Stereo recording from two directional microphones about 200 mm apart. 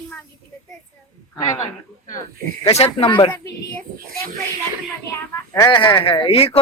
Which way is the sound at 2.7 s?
30° left (ahead or behind).